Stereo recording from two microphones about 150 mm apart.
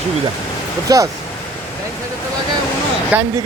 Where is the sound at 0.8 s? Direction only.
25° right (ahead or behind).